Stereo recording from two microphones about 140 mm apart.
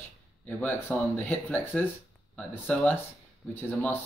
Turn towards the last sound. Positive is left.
turn(degrees=15)  # may be behind; listen again after turning